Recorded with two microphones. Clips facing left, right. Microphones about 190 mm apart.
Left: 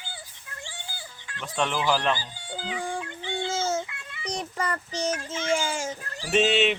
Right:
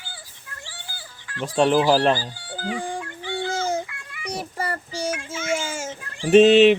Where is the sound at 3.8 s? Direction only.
25° left (ahead or behind).